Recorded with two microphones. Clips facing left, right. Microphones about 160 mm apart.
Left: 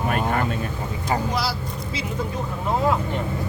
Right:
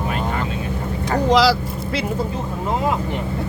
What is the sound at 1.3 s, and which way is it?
Vehicle, 90° right.